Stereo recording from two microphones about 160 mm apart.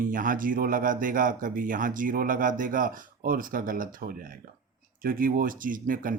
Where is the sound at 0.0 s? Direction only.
60° right (ahead or behind).